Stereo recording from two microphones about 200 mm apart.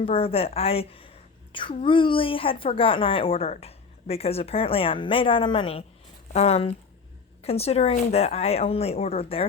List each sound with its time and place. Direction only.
0.0 s a woman's voice: 30° left (ahead or behind)